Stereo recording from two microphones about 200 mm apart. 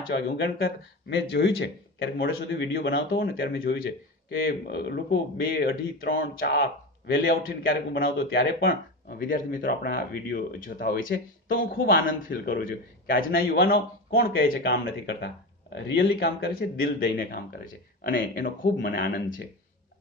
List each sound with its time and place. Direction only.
0.0 s a man's voice: 50° left (ahead or behind)